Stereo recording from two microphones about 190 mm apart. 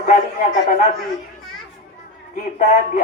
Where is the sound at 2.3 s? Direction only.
40° left (ahead or behind).